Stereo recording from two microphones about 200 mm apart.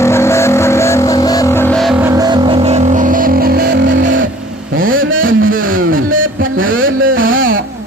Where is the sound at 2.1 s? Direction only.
20° right (ahead or behind); by 4.3 s 65° right (ahead or behind).